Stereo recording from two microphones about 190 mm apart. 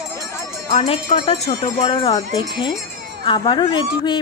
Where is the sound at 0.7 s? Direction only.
35° left (ahead or behind).